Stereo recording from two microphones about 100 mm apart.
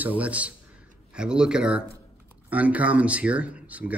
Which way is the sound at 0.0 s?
15° right (ahead or behind).